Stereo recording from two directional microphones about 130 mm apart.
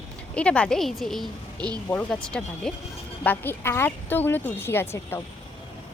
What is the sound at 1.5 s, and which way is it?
Speech, 35° right (ahead or behind).